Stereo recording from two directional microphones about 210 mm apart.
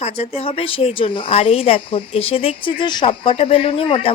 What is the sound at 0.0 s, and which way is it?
Speech, 30° left (ahead or behind).